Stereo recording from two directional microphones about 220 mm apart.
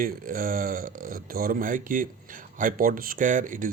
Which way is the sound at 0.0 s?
40° right (ahead or behind).